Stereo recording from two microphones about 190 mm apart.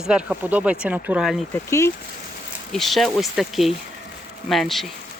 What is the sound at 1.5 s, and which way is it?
Speech, 15° left (ahead or behind).